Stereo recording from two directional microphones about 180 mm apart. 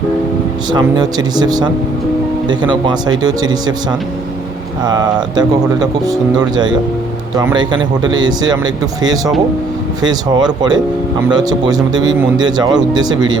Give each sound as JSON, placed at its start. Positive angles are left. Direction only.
{"t": 0.7, "sound": "speech", "side_deg": -20}
{"t": 4.8, "sound": "speech", "side_deg": -25}